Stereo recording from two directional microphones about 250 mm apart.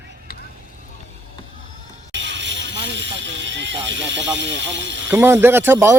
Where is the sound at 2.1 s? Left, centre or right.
Right.